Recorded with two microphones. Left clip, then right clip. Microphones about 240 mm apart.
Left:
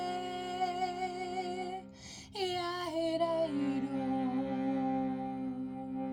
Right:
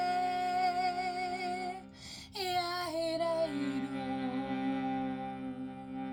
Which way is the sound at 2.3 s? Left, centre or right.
Right.